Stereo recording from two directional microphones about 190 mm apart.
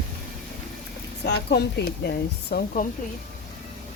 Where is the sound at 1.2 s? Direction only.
60° left (ahead or behind).